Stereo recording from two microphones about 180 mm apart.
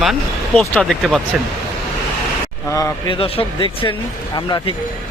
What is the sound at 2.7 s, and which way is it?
Speech, 25° left (ahead or behind).